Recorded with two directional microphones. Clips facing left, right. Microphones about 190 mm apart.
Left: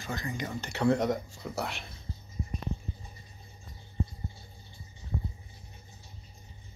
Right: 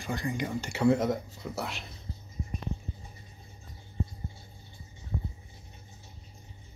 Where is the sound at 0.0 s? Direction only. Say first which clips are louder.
Right 3 dB; 10° right (ahead or behind).